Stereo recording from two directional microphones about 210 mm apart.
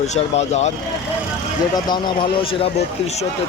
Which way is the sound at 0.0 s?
30° left (ahead or behind).